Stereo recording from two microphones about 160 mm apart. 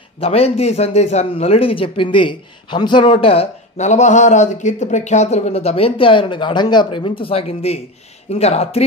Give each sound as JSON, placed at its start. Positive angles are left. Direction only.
{"t": 0.2, "sound": "a man's voice", "side_deg": 40}